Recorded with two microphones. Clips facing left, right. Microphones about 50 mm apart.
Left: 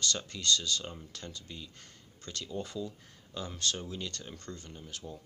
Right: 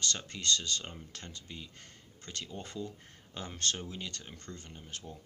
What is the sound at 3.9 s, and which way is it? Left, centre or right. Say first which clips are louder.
Speech: left 2 dB; right.